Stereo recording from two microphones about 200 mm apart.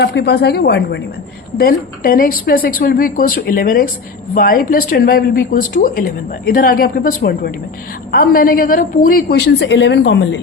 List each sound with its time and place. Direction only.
0.0 s a woman's voice: 55° left (ahead or behind)